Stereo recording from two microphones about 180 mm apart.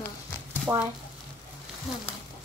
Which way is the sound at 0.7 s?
15° right (ahead or behind).